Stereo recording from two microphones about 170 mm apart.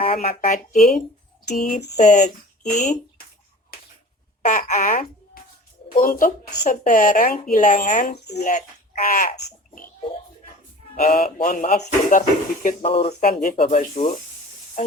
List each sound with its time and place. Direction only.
0.0 s a sound: 35° left (ahead or behind)
0.3 s a woman's voice: 50° left (ahead or behind)
0.8 s speech: centre (ahead or behind)
1.5 s a woman's voice: 50° left (ahead or behind)
4.4 s a woman's voice: 50° left (ahead or behind)
10.9 s a woman's voice: 50° left (ahead or behind)
12.8 s speech: 35° left (ahead or behind)
13.2 s speech: 60° left (ahead or behind)
13.6 s speech: 40° left (ahead or behind)